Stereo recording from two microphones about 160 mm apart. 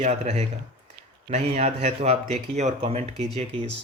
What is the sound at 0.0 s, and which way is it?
Speech, 45° right (ahead or behind).